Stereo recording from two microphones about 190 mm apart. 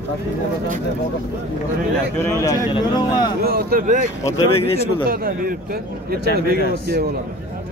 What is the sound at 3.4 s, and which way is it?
Speech, 55° right (ahead or behind).